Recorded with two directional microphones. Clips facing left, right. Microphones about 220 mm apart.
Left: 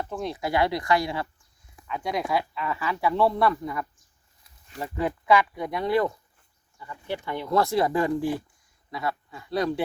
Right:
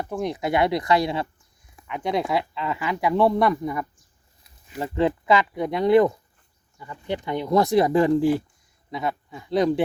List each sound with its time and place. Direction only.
0.1 s speech: 15° right (ahead or behind)